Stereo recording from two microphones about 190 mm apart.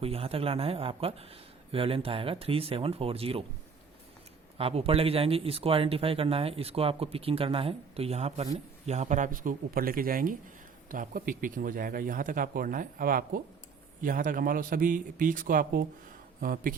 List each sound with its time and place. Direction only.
0.0 s speech: 30° right (ahead or behind)
4.5 s speech: 30° right (ahead or behind); by 16.7 s 50° right (ahead or behind)